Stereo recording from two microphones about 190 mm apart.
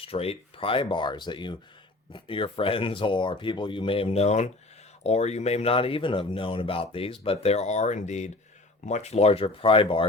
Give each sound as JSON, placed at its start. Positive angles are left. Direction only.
{"t": 0.0, "sound": "speech", "side_deg": 30}